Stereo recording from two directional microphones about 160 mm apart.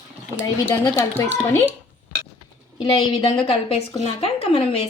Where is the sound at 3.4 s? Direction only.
40° left (ahead or behind).